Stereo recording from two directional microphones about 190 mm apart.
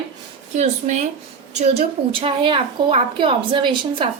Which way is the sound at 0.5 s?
35° right (ahead or behind).